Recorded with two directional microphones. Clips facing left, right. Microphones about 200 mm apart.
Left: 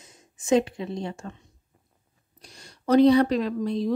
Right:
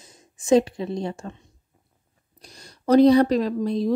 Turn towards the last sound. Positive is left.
turn(degrees=-40)  # may be behind; listen again after turning